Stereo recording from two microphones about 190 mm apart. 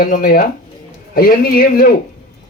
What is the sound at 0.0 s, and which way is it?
Speech, 50° left (ahead or behind).